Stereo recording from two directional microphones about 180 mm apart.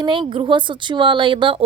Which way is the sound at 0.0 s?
25° right (ahead or behind).